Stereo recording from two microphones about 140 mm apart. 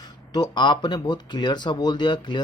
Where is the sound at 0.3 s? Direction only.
30° left (ahead or behind).